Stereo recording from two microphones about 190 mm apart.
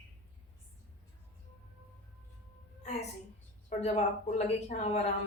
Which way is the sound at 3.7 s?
35° left (ahead or behind).